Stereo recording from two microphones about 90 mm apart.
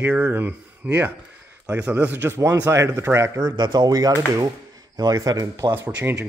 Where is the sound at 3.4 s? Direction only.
50° right (ahead or behind).